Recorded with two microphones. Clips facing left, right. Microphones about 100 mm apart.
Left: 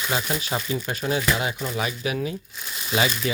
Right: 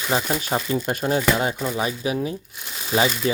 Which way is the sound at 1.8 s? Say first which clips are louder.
Right 1 dB; 30° right (ahead or behind).